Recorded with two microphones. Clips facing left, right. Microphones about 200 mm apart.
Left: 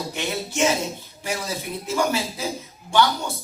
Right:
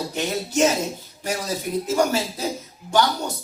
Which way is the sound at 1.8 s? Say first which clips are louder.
Right 1 dB; 40° right (ahead or behind).